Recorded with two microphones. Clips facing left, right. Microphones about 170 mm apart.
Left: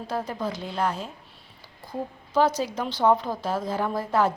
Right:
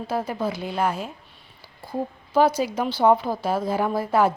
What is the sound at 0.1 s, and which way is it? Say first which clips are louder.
A woman's voice: right 3 dB; 10° right (ahead or behind).